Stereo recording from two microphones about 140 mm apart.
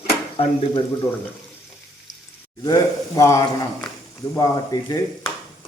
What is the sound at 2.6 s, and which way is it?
Speech, 25° left (ahead or behind).